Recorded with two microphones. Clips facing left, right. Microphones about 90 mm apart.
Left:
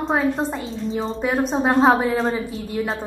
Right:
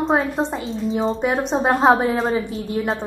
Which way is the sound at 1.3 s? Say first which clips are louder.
Even; 20° right (ahead or behind).